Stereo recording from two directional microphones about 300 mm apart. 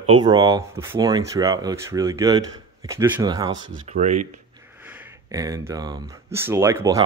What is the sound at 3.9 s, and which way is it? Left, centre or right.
Speech, right.